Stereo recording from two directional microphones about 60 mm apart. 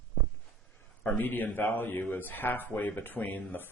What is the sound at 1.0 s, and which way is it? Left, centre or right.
A man's voice, left.